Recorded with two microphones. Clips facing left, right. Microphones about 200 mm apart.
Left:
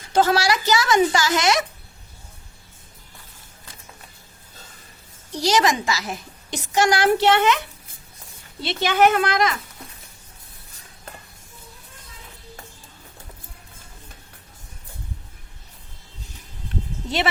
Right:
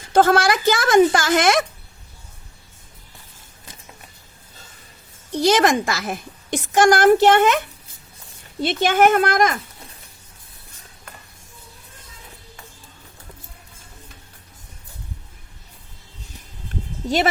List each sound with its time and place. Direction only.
0.1 s a woman's voice: 50° right (ahead or behind)
5.3 s a woman's voice: 55° right (ahead or behind)
8.6 s a woman's voice: 50° right (ahead or behind)